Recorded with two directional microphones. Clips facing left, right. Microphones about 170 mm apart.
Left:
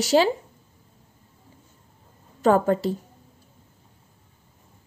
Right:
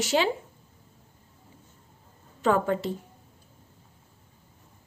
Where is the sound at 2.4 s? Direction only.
40° left (ahead or behind).